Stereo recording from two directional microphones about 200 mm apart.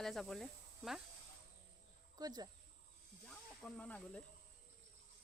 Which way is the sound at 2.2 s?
20° right (ahead or behind).